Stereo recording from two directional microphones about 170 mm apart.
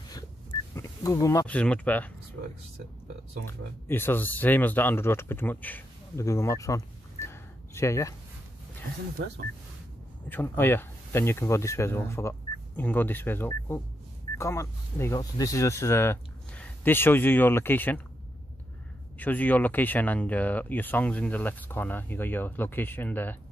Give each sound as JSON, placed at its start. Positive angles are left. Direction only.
{"t": 0.7, "sound": "a sound", "side_deg": 20}
{"t": 1.5, "sound": "speech", "side_deg": 5}
{"t": 3.4, "sound": "speech", "side_deg": 15}
{"t": 10.3, "sound": "speech", "side_deg": 15}
{"t": 19.1, "sound": "speech", "side_deg": 10}